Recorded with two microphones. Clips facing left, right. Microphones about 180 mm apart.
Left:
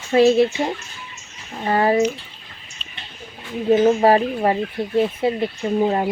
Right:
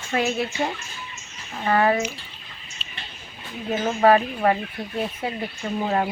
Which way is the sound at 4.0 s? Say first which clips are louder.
Left 2 dB; 30° left (ahead or behind).